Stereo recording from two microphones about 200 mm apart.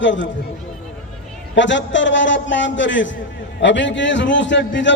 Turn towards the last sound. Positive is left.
turn(degrees=65)  # may be behind; listen again after turning